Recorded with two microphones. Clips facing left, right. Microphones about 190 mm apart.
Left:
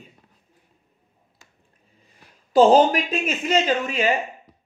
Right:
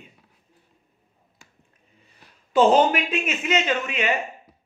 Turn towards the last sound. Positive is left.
turn(degrees=35)  # may be behind; listen again after turning